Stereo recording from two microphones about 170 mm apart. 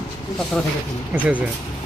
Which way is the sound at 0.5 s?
5° left (ahead or behind).